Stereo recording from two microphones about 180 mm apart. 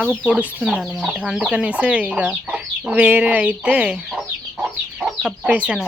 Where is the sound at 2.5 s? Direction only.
5° right (ahead or behind).